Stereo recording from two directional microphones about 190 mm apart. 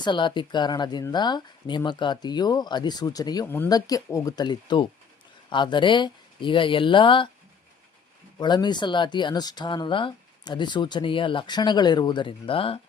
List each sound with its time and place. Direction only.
0.0 s speech: 25° left (ahead or behind)
8.4 s speech: 20° left (ahead or behind)